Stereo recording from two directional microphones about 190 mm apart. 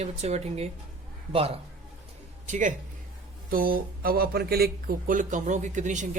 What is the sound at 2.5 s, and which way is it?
Speech, 40° right (ahead or behind).